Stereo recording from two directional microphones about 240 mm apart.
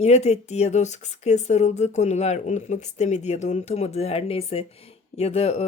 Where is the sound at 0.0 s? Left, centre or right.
Left.